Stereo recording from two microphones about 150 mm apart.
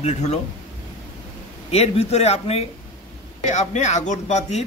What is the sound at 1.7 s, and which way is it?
A man's voice, 45° left (ahead or behind).